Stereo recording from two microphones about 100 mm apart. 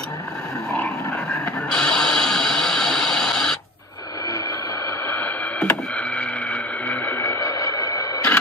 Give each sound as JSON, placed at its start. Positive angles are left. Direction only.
{"t": 0.7, "sound": "music", "side_deg": 10}
{"t": 5.0, "sound": "radio", "side_deg": 20}
{"t": 7.2, "sound": "a sound", "side_deg": 30}